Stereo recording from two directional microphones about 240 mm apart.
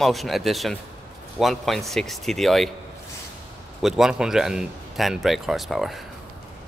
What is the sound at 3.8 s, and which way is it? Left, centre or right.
A man's voice, centre.